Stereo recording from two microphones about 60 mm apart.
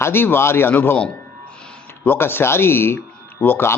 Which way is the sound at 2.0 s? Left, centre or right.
Left.